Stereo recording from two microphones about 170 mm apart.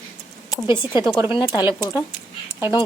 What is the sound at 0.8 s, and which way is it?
Speech, 25° left (ahead or behind).